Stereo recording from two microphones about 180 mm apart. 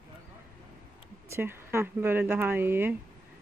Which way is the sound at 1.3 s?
15° right (ahead or behind).